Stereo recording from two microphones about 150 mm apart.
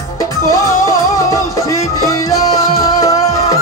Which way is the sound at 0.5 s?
20° left (ahead or behind).